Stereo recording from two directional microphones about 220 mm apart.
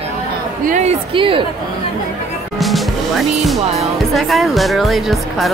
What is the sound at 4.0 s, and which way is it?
Speech, centre (ahead or behind).